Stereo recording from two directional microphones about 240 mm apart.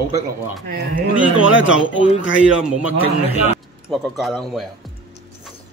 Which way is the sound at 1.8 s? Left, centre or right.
Left.